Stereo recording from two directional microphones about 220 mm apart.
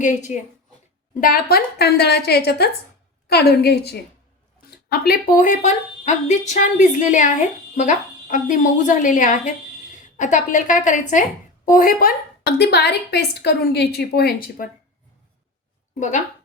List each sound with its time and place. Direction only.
0.0 s a woman's voice: 35° left (ahead or behind)
16.0 s a woman's voice: 35° left (ahead or behind)